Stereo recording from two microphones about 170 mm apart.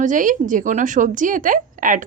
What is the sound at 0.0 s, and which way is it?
A woman's voice, 50° right (ahead or behind).